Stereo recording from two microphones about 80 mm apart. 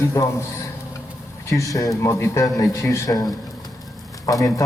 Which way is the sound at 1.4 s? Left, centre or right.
Left.